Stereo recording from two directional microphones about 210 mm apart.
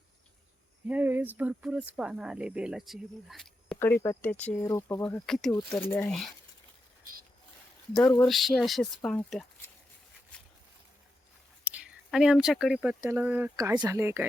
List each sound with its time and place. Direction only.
0.9 s speech: 10° right (ahead or behind)
8.0 s speech: 15° left (ahead or behind)
8.3 s speech: centre (ahead or behind)
10.3 s a sound: 5° left (ahead or behind)
11.6 s speech: 5° right (ahead or behind)